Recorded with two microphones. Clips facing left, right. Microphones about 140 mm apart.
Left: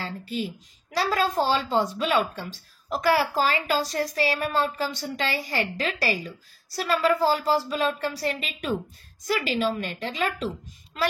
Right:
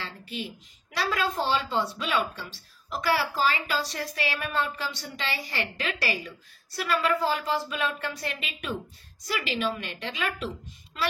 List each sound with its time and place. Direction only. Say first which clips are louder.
0.0 s a woman's voice: left 6 dB; 40° left (ahead or behind)